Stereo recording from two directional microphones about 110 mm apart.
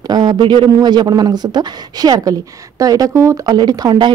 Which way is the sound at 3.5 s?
40° right (ahead or behind).